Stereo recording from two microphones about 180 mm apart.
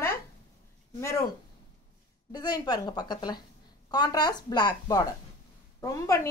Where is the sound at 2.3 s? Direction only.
25° left (ahead or behind).